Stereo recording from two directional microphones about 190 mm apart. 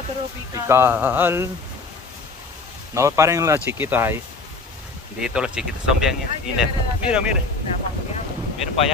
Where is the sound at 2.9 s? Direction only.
15° right (ahead or behind).